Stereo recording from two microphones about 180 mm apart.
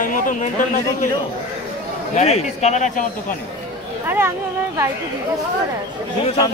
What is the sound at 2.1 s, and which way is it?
Speech, 35° left (ahead or behind).